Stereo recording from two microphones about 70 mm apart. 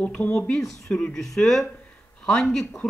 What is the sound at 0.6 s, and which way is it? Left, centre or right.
Speech, centre.